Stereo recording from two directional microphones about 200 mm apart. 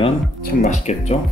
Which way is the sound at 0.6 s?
35° left (ahead or behind).